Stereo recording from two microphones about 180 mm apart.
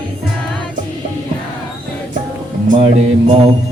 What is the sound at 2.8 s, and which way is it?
Mantra, 30° right (ahead or behind).